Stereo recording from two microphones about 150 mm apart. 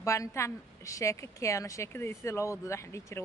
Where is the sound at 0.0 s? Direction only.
20° left (ahead or behind).